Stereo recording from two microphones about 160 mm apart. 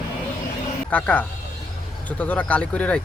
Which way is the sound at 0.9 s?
10° left (ahead or behind).